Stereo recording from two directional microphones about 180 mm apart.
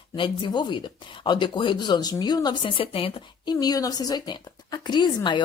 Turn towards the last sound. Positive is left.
turn(degrees=25)  # may be behind; listen again after turning